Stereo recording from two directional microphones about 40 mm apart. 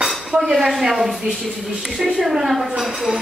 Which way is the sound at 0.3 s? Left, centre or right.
Right.